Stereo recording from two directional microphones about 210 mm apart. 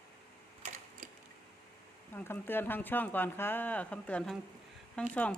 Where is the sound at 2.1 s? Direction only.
10° left (ahead or behind).